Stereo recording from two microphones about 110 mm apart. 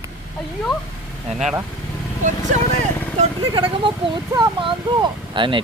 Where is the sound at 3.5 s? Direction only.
50° right (ahead or behind).